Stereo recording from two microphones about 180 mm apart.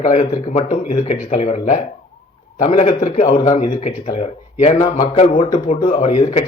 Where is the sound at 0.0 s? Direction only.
40° left (ahead or behind).